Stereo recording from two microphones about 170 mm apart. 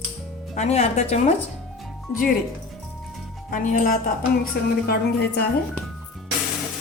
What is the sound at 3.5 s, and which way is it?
Speech, 50° left (ahead or behind).